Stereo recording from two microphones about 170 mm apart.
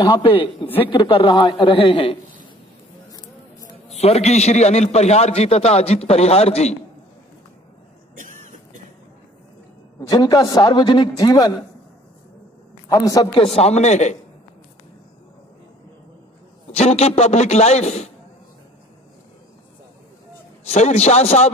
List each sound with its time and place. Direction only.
0.0 s a man's voice: 30° left (ahead or behind)
3.9 s a man's voice: 40° left (ahead or behind)
8.2 s vehicle: 45° right (ahead or behind)
9.9 s a man's voice: 20° left (ahead or behind)
12.9 s a man's voice: 20° left (ahead or behind)
13.4 s a man's voice: 35° left (ahead or behind)
16.7 s a man's voice: 40° left (ahead or behind)
20.6 s a man's voice: 40° left (ahead or behind)